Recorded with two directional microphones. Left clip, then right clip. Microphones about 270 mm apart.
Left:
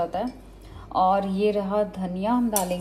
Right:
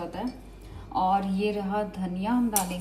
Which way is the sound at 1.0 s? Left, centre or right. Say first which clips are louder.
Left 4 dB; right.